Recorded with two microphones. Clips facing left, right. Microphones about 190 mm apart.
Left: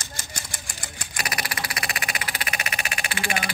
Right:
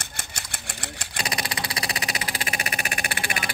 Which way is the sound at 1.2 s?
25° right (ahead or behind).